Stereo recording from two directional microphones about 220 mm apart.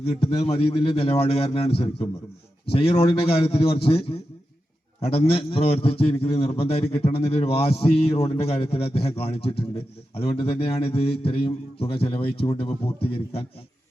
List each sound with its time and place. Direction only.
0.0 s a man's voice: 25° left (ahead or behind)